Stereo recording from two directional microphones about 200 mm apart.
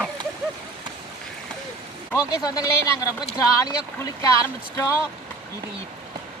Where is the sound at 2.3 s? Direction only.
20° left (ahead or behind).